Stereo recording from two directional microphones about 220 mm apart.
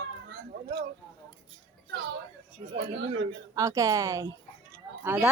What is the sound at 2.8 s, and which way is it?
Speech, 60° right (ahead or behind).